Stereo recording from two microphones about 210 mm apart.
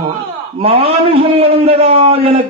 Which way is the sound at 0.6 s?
25° right (ahead or behind).